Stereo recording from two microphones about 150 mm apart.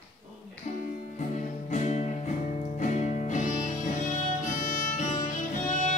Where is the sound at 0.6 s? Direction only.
55° left (ahead or behind).